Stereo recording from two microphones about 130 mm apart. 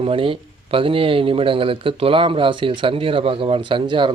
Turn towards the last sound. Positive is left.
turn(degrees=-40)  # may be behind; listen again after turning